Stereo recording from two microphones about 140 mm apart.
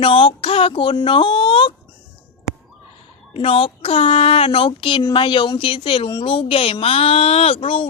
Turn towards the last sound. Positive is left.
turn(degrees=40)  # may be behind; listen again after turning